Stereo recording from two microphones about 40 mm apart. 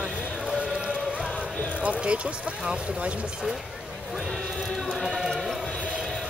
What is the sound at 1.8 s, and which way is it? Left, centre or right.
Speech, right.